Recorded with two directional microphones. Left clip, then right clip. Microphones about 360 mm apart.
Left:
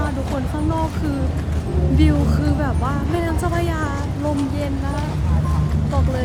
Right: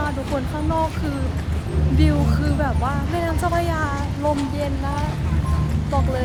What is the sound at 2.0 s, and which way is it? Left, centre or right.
Speech, centre.